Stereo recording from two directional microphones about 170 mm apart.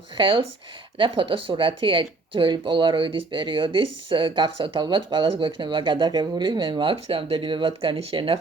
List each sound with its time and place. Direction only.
0.2 s speech: 30° right (ahead or behind)